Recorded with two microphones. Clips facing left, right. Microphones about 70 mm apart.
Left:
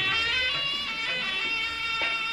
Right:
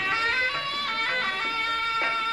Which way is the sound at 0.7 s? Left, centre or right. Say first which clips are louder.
Right 5 dB; right.